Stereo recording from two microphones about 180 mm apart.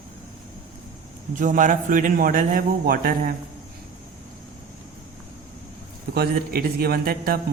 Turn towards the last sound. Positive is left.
turn(degrees=-55)  # may be behind; listen again after turning